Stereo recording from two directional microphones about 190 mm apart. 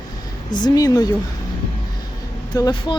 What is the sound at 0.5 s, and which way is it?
Speech, 20° left (ahead or behind).